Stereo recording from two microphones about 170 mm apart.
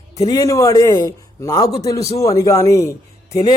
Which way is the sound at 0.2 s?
20° left (ahead or behind).